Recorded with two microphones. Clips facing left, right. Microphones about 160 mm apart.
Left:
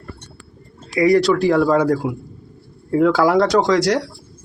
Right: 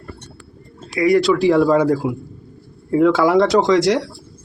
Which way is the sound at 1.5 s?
15° right (ahead or behind).